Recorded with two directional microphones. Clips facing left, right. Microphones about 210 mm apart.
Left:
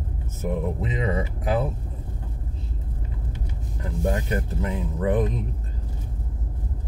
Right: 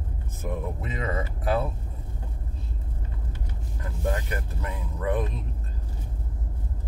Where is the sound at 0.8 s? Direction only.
15° left (ahead or behind).